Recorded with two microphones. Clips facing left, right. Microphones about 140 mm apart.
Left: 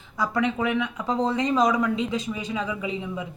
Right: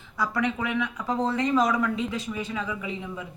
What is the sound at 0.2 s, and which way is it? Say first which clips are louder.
Speech: left 3 dB; 20° left (ahead or behind).